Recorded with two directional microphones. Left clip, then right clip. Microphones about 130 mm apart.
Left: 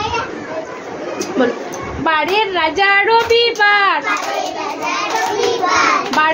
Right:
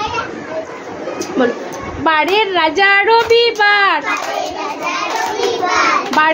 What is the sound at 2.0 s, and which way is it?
Child singing, 50° right (ahead or behind).